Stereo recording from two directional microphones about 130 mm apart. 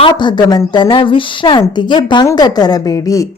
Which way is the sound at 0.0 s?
35° left (ahead or behind).